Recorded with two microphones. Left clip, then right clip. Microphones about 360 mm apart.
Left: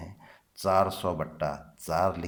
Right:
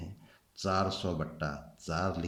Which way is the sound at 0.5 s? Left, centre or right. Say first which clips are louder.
Left 7 dB; centre.